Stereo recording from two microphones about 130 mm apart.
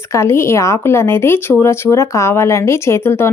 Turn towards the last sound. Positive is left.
turn(degrees=20)  # may be behind; listen again after turning